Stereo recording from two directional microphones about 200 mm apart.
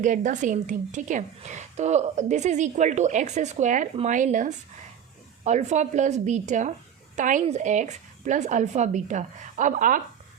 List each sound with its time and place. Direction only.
0.0 s a woman's voice: 40° right (ahead or behind)